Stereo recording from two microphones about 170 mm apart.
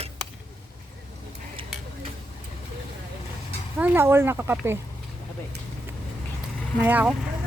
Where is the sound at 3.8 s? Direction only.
10° right (ahead or behind).